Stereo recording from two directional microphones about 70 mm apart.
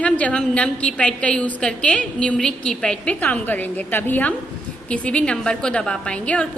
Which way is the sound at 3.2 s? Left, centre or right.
Left.